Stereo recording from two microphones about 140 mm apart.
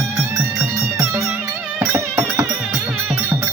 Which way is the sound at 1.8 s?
20° right (ahead or behind).